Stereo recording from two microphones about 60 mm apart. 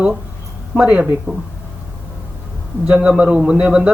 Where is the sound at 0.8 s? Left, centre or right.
Centre.